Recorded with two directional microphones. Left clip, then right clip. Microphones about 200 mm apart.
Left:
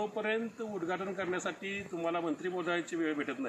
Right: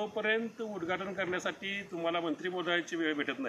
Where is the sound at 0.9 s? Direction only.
15° right (ahead or behind).